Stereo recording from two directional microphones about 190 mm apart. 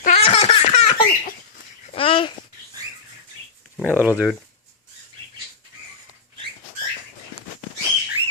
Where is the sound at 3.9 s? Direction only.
10° right (ahead or behind).